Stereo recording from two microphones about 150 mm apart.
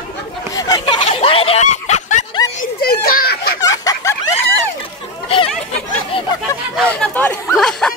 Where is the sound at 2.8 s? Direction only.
90° left.